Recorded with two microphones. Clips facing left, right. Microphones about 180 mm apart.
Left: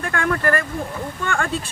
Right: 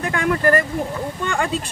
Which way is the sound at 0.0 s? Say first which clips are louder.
Right 3 dB; 20° right (ahead or behind).